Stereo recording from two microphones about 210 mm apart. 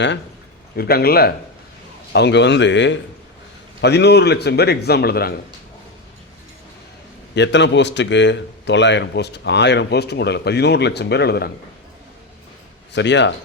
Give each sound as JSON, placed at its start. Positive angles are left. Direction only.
{"t": 0.8, "sound": "a man's voice", "side_deg": 45}
{"t": 7.3, "sound": "a man's voice", "side_deg": 55}
{"t": 12.9, "sound": "speech", "side_deg": 55}